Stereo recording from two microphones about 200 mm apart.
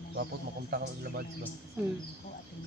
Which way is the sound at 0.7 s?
50° right (ahead or behind).